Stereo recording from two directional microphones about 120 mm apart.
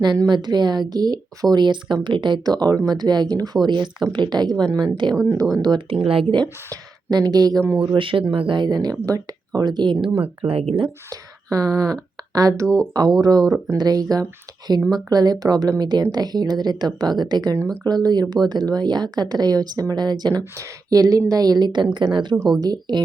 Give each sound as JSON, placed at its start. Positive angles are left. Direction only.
{"t": 0.0, "sound": "speech", "side_deg": -40}
{"t": 5.2, "sound": "a woman's voice", "side_deg": -25}
{"t": 5.6, "sound": "speech", "side_deg": -40}
{"t": 6.1, "sound": "speech", "side_deg": -50}
{"t": 6.4, "sound": "speech", "side_deg": -35}
{"t": 7.8, "sound": "speech", "side_deg": -45}
{"t": 11.1, "sound": "speech", "side_deg": -30}
{"t": 12.6, "sound": "speech", "side_deg": 5}
{"t": 12.9, "sound": "a woman's voice", "side_deg": -35}